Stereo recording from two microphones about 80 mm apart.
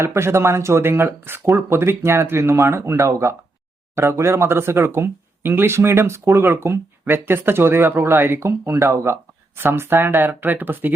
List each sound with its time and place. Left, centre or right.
0.0 s speech: right